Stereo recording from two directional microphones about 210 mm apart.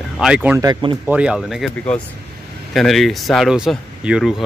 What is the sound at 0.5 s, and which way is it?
Speech, 20° right (ahead or behind).